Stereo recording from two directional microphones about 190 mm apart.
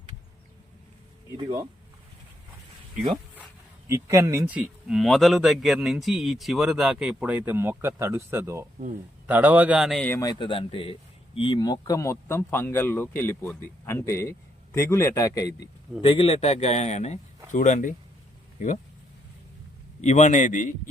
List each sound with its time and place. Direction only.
3.8 s a man's voice: 15° right (ahead or behind); by 10.2 s 5° left (ahead or behind)
10.2 s speech: 20° left (ahead or behind)
16.0 s a man's voice: 30° left (ahead or behind)
20.0 s a man's voice: 35° left (ahead or behind)